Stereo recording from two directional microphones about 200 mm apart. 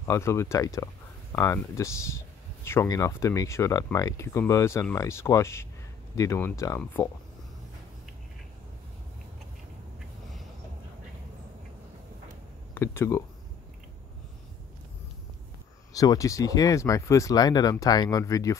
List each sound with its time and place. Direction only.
0.0 s speech: 15° left (ahead or behind)
12.7 s speech: 10° left (ahead or behind)
15.9 s speech: 15° left (ahead or behind)